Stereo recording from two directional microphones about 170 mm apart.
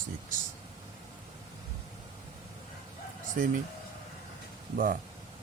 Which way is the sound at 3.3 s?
50° right (ahead or behind).